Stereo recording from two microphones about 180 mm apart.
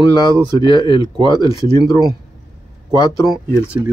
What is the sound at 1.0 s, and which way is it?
Speech, 25° right (ahead or behind).